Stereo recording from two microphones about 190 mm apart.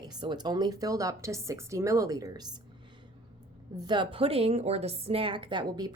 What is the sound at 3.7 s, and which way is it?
A woman's voice, 20° right (ahead or behind).